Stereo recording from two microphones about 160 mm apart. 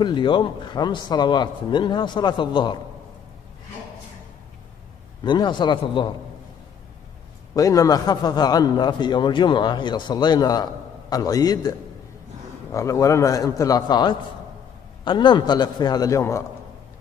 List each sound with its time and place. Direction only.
0.0 s a man's voice: 30° left (ahead or behind)
5.2 s a man's voice: 30° left (ahead or behind)
7.5 s a man's voice: 20° left (ahead or behind)
12.7 s a man's voice: 20° left (ahead or behind)